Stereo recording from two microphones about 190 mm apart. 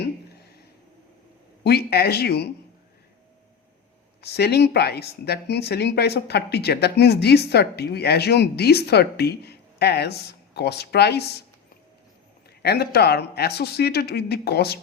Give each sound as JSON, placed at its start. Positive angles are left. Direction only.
{"t": 1.6, "sound": "speech", "side_deg": 55}
{"t": 4.2, "sound": "speech", "side_deg": 55}
{"t": 12.6, "sound": "speech", "side_deg": 55}